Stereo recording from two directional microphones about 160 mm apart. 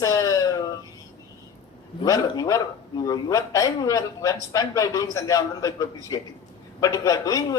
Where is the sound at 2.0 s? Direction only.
25° left (ahead or behind).